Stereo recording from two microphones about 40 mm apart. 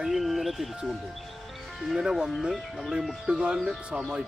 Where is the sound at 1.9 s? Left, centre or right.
Centre.